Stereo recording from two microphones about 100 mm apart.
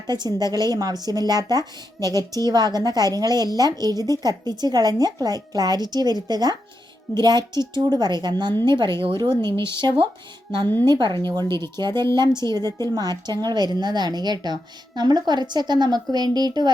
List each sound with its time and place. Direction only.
0.1 s a woman's voice: 45° right (ahead or behind)